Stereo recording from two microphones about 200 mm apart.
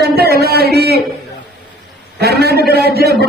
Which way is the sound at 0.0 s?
50° right (ahead or behind).